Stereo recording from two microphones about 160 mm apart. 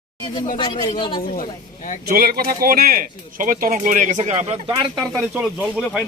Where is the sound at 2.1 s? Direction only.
70° right (ahead or behind); by 4.6 s 45° right (ahead or behind).